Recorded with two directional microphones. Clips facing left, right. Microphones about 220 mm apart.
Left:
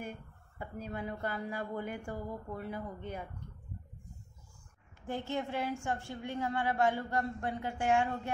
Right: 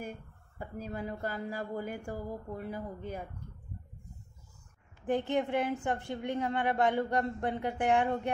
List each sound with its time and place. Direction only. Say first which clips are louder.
0.6 s speech: right 2 dB; 40° right (ahead or behind)
5.0 s a woman's voice: right 6 dB; 15° right (ahead or behind)